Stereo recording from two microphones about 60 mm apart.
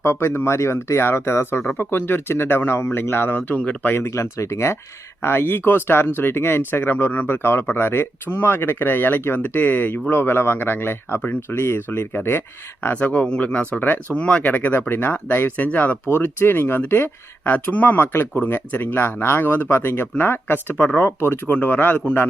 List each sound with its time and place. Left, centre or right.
0.0 s speech: left
3.9 s speech: left
12.8 s speech: left
14.2 s speech: centre
14.5 s speech: left
17.4 s speech: left